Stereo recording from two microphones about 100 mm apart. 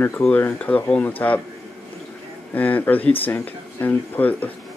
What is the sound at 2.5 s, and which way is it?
Speech, 15° left (ahead or behind).